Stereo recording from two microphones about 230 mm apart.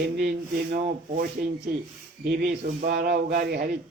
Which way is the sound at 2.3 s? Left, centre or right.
Right.